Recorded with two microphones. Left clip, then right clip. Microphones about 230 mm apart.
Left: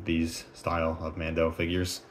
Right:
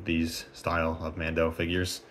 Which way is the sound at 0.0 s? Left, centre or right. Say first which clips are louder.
Even; centre.